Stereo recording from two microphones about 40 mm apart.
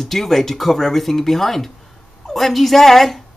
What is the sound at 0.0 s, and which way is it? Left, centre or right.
A woman's voice, centre.